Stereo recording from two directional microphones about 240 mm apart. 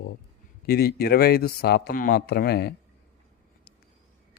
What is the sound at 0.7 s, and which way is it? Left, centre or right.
Speech, left.